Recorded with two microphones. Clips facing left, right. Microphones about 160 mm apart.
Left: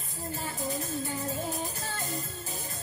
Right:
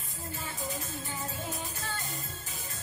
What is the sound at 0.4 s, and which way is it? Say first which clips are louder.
Music: left 4 dB; 35° left (ahead or behind).